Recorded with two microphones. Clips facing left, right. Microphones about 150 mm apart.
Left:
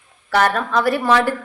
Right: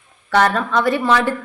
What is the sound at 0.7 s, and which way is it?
Speech, 40° left (ahead or behind).